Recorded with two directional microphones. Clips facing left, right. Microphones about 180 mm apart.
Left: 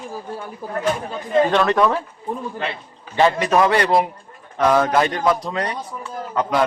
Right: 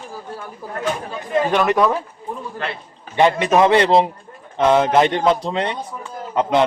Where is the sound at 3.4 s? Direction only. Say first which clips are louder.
Right 3 dB; 20° right (ahead or behind).